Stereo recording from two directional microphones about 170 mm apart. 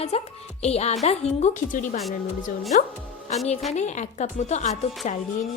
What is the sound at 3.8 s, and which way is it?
A woman's voice, 45° left (ahead or behind).